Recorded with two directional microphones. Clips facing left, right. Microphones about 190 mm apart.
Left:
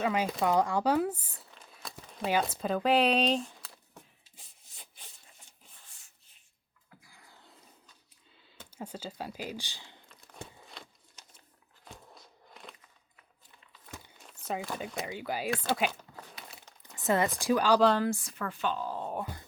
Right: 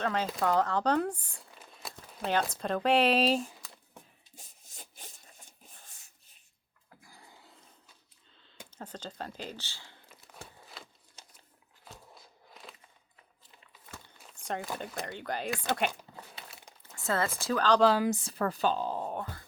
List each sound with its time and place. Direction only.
0.0 s speech: 10° left (ahead or behind)
1.5 s crumpling: 5° right (ahead or behind)
2.2 s speech: 5° left (ahead or behind)
4.4 s rub: 45° right (ahead or behind)
8.7 s speech: 10° left (ahead or behind)
10.8 s a sound: 5° right (ahead or behind)
14.4 s speech: 5° left (ahead or behind)
16.8 s a sound: 15° left (ahead or behind)
17.4 s speech: 10° left (ahead or behind)
17.8 s speech: 5° right (ahead or behind)
18.1 s speech: 30° right (ahead or behind)
19.1 s speech: 15° left (ahead or behind)